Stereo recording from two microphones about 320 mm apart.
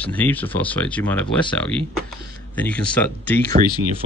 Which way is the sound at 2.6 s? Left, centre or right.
Centre.